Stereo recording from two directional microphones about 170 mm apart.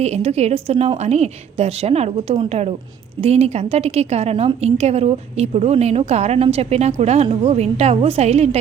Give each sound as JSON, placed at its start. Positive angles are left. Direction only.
{"t": 0.0, "sound": "a woman's voice", "side_deg": -40}